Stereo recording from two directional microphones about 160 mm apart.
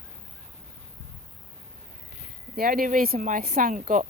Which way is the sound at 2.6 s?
60° right (ahead or behind).